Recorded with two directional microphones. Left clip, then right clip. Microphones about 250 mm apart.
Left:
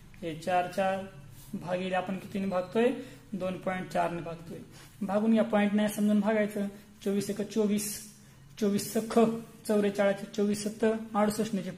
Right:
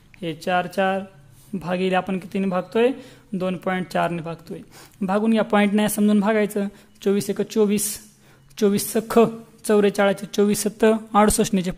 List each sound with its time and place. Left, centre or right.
0.2 s a woman's voice: right